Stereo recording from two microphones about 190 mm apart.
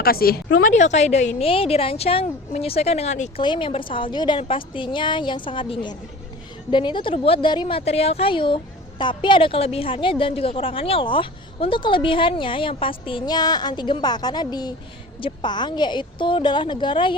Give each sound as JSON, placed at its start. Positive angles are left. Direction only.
{"t": 0.0, "sound": "a woman's voice", "side_deg": 50}